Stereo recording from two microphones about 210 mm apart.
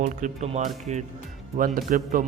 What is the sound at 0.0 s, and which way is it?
Speech, 35° right (ahead or behind).